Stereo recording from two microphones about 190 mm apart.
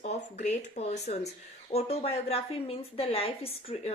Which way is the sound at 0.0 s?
35° left (ahead or behind).